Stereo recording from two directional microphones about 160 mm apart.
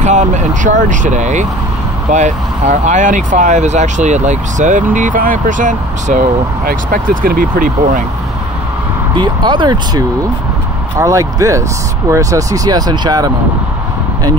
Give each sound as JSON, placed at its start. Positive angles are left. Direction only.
{"t": 0.0, "sound": "speech", "side_deg": -50}
{"t": 9.1, "sound": "speech", "side_deg": -30}